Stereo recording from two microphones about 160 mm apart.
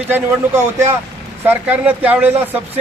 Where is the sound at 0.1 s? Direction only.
15° right (ahead or behind).